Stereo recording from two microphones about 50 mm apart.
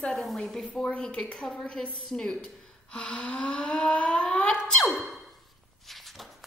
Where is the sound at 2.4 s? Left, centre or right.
Left.